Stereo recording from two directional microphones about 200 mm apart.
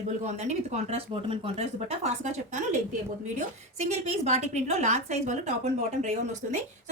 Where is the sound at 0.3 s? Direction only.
35° right (ahead or behind).